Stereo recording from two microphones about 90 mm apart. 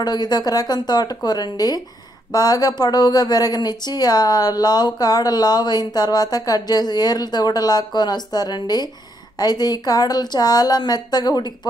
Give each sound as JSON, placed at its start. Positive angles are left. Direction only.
{"t": 0.0, "sound": "speech", "side_deg": 50}